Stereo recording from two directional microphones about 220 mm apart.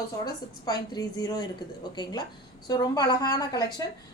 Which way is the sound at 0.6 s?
15° left (ahead or behind).